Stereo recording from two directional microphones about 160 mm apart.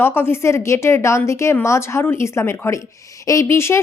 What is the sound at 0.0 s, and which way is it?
Speech, 15° left (ahead or behind).